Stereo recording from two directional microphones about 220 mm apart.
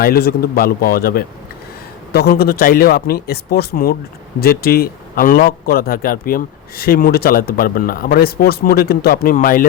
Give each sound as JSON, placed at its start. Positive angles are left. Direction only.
{"t": 0.0, "sound": "a man's voice", "side_deg": 45}